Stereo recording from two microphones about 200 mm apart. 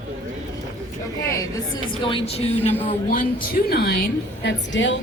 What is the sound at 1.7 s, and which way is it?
Speech, 25° left (ahead or behind).